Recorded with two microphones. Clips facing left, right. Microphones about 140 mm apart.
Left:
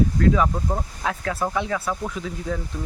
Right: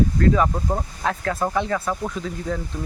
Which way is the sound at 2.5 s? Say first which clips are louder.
Right 1 dB; 5° left (ahead or behind).